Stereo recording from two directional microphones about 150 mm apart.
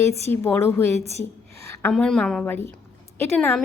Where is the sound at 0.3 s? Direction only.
15° left (ahead or behind).